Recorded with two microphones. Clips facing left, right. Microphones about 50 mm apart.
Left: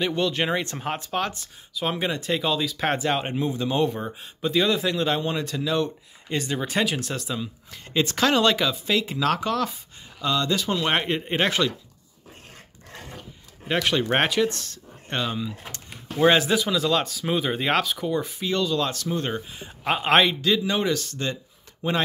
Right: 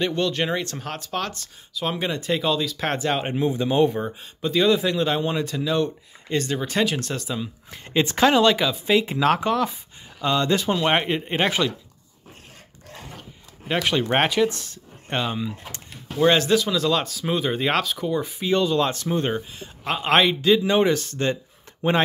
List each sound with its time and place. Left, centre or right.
0.0 s speech: centre
3.4 s speech: centre
4.0 s speech: centre
7.7 s speech: right
8.4 s speech: centre
8.8 s speech: right
10.7 s speech: centre
13.7 s speech: centre
16.2 s speech: centre
18.4 s speech: right
19.5 s speech: centre
20.1 s speech: centre
20.4 s speech: right